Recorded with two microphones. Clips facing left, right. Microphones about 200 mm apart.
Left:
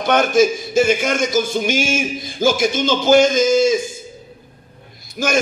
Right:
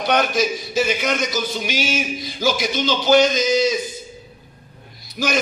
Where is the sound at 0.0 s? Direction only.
50° left (ahead or behind).